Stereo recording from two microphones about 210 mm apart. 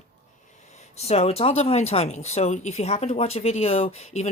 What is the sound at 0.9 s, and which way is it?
Speech, 30° left (ahead or behind).